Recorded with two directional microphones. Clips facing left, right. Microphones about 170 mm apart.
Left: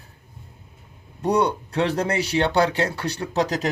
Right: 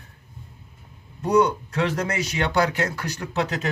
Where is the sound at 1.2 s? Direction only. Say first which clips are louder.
Right 1 dB; 35° left (ahead or behind).